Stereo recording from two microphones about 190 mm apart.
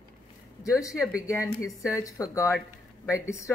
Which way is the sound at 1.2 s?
15° left (ahead or behind).